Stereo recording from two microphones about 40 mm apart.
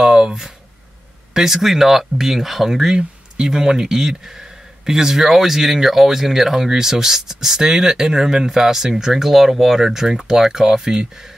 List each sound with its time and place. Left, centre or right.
0.0 s speech: centre